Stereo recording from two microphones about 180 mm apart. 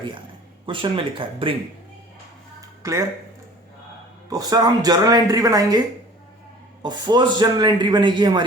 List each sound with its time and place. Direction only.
0.6 s a man's voice: 30° right (ahead or behind)
2.6 s a sound: 15° right (ahead or behind)
4.3 s a man's voice: 20° right (ahead or behind)
6.8 s a man's voice: 25° right (ahead or behind)